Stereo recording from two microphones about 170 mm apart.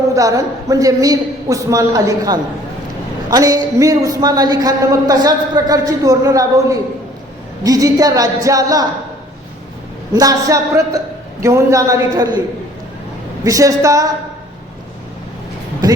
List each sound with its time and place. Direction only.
0.1 s a man's voice: 20° right (ahead or behind)
10.2 s a man's voice: 20° right (ahead or behind)
13.4 s a man's voice: 20° right (ahead or behind)